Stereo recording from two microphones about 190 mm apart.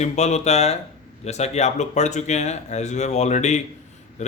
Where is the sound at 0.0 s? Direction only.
35° left (ahead or behind).